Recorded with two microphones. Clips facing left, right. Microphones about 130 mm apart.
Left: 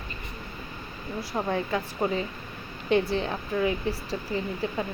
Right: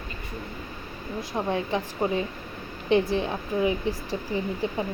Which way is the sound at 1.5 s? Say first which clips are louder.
Right 1 dB; 25° right (ahead or behind).